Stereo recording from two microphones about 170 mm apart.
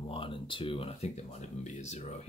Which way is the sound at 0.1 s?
30° left (ahead or behind).